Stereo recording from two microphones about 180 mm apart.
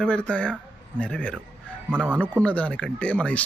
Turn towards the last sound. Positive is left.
turn(degrees=5)  # may be behind; listen again after turning